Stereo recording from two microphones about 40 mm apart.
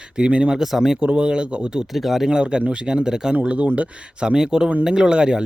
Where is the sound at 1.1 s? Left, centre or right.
Right.